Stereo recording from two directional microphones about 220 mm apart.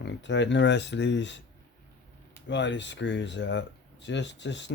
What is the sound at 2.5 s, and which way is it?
Speech, 55° left (ahead or behind).